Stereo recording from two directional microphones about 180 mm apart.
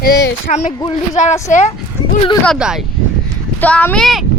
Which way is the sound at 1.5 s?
40° left (ahead or behind).